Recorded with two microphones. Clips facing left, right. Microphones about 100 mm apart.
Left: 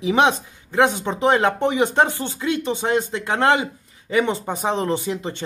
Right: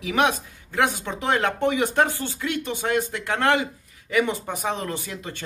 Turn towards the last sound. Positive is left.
turn(degrees=25)  # may be behind; listen again after turning